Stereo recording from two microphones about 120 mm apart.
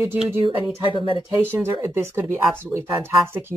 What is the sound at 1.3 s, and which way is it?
A woman's voice, 20° right (ahead or behind).